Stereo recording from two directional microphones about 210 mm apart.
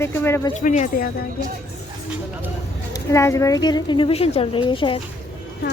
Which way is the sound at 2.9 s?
15° left (ahead or behind).